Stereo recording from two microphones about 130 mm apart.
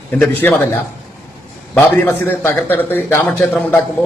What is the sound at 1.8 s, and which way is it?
A man's voice, 15° left (ahead or behind).